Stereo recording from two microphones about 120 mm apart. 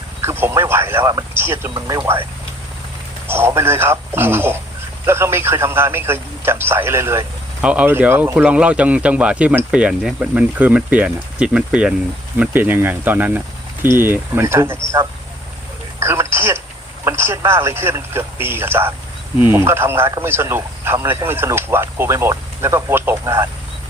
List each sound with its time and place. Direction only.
0.2 s speech: 20° right (ahead or behind)
3.2 s speech: 20° right (ahead or behind)
7.6 s speech: 10° right (ahead or behind)
16.0 s radio: 20° right (ahead or behind)
17.0 s speech: 20° right (ahead or behind)